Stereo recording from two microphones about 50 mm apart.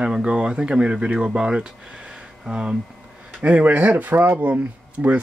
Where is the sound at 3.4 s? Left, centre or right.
Right.